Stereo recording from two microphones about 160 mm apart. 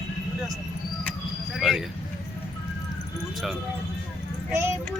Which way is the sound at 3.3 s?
Centre (ahead or behind).